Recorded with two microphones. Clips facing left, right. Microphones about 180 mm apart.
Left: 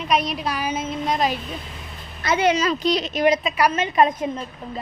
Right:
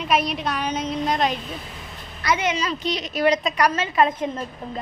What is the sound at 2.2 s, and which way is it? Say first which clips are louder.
Speech: left 4 dB; 30° left (ahead or behind).